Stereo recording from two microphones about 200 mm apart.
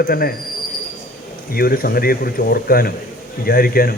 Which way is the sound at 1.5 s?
45° left (ahead or behind).